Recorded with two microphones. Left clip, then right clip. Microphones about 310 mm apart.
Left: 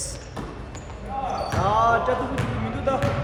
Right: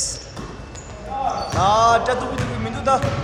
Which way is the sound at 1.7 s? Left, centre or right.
Centre.